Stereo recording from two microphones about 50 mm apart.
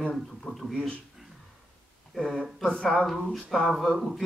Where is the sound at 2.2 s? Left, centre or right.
Centre.